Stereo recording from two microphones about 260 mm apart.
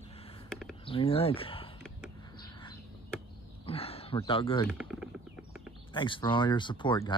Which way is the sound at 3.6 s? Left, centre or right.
Left.